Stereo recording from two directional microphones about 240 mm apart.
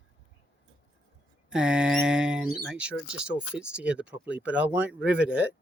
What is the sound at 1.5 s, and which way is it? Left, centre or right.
Speech, centre.